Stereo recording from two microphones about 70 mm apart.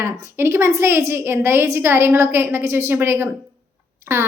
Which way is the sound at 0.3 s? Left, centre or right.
Right.